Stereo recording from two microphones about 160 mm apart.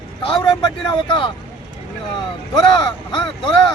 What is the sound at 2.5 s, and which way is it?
Speech, 30° left (ahead or behind).